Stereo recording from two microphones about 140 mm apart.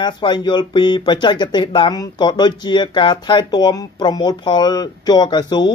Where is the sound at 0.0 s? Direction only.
35° left (ahead or behind).